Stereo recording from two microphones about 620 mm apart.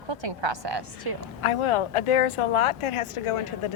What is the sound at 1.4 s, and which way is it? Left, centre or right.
Speech, left.